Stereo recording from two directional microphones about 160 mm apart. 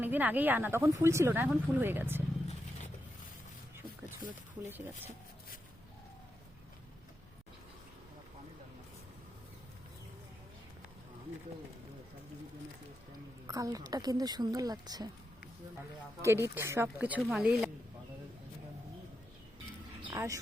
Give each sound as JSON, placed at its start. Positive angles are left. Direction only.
{"t": 0.0, "sound": "speech", "side_deg": -10}
{"t": 4.6, "sound": "speech", "side_deg": -15}
{"t": 13.5, "sound": "a woman's voice", "side_deg": -20}
{"t": 16.2, "sound": "speech", "side_deg": -15}
{"t": 20.1, "sound": "speech", "side_deg": -20}